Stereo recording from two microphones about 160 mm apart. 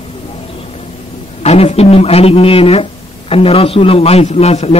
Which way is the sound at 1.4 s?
40° left (ahead or behind).